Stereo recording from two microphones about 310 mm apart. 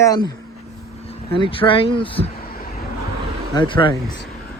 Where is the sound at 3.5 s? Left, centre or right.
Centre.